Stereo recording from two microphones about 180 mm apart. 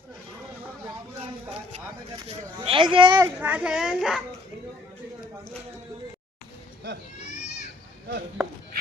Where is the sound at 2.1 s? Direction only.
25° right (ahead or behind).